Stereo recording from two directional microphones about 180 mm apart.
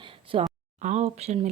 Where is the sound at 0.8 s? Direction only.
40° right (ahead or behind).